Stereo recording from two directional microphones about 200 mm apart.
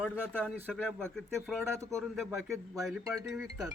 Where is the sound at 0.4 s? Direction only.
5° left (ahead or behind).